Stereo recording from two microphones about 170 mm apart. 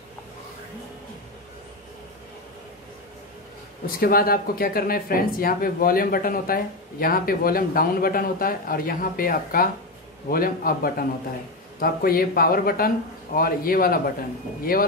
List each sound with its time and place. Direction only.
4.0 s speech: 60° left (ahead or behind)